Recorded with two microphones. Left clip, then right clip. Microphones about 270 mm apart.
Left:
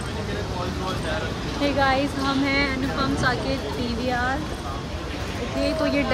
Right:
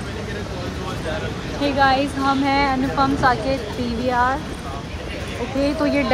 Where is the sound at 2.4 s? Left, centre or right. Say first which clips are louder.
Right 5 dB; centre.